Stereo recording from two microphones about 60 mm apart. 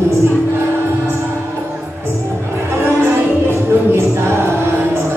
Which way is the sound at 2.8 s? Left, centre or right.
Right.